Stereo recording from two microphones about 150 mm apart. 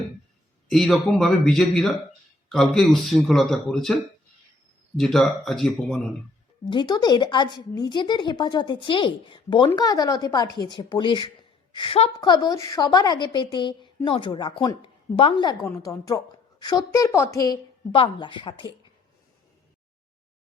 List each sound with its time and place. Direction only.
0.7 s speech: centre (ahead or behind)
6.7 s a woman's voice: 30° left (ahead or behind)
12.1 s a woman's voice: 30° left (ahead or behind)
15.6 s a woman's voice: 20° left (ahead or behind)